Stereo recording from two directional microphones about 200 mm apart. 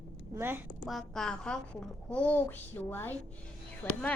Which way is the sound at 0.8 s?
Centre (ahead or behind).